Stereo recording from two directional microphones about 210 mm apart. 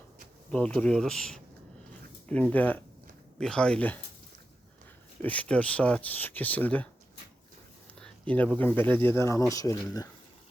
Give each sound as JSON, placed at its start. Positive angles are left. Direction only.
{"t": 0.5, "sound": "speech", "side_deg": 5}
{"t": 5.2, "sound": "speech", "side_deg": 5}
{"t": 7.9, "sound": "speech", "side_deg": 5}